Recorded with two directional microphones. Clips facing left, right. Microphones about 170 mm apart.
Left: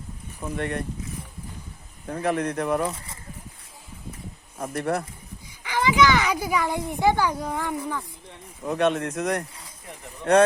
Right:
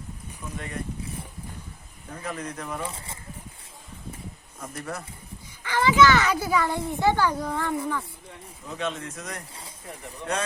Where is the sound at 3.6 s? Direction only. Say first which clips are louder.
Even; 25° right (ahead or behind).